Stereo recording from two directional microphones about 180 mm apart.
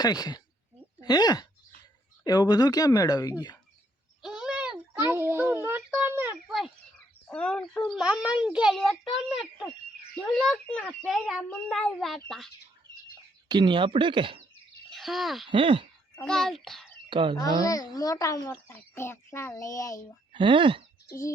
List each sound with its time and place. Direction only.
0.0 s speech: 20° left (ahead or behind)
4.2 s a sound: 5° right (ahead or behind)
7.3 s a child's voice: 5° left (ahead or behind)
13.5 s speech: 25° right (ahead or behind)
14.8 s a sound: centre (ahead or behind)
15.4 s speech: 30° right (ahead or behind)
16.1 s a child's voice: 5° left (ahead or behind)
17.1 s speech: 25° right (ahead or behind)
17.7 s a child's voice: 20° left (ahead or behind)
20.3 s speech: 30° right (ahead or behind)
21.1 s a child's voice: 15° left (ahead or behind)